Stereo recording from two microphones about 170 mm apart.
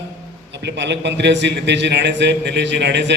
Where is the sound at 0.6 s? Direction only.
90° right.